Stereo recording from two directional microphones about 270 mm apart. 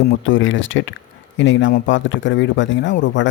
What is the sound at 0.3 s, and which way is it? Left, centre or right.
Speech, left.